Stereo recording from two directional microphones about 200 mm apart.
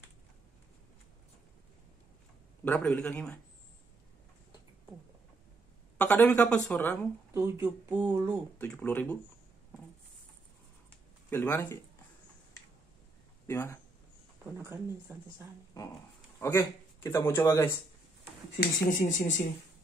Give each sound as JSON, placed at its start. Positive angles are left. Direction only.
{"t": 2.6, "sound": "speech", "side_deg": 5}
{"t": 5.9, "sound": "speech", "side_deg": 5}
{"t": 7.3, "sound": "speech", "side_deg": -15}
{"t": 8.5, "sound": "speech", "side_deg": 5}
{"t": 11.2, "sound": "speech", "side_deg": 10}
{"t": 13.5, "sound": "speech", "side_deg": 10}
{"t": 14.4, "sound": "speech", "side_deg": -15}
{"t": 16.3, "sound": "a man's voice", "side_deg": 10}
{"t": 18.6, "sound": "speech", "side_deg": 40}